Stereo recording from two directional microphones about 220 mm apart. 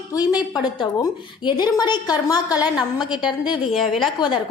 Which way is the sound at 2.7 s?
Centre (ahead or behind).